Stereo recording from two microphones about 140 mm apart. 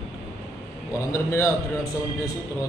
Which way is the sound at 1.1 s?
20° left (ahead or behind).